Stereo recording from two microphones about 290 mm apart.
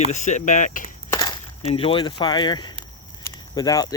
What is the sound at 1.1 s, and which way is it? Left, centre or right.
Speech, centre.